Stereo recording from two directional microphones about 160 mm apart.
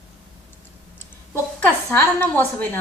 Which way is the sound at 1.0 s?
10° left (ahead or behind).